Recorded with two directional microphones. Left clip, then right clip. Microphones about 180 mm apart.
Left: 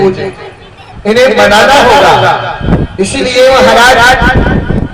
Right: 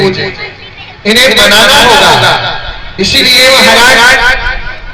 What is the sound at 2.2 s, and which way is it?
A man's voice, 35° left (ahead or behind).